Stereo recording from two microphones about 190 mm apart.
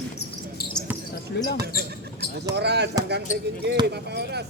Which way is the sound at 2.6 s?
60° right (ahead or behind).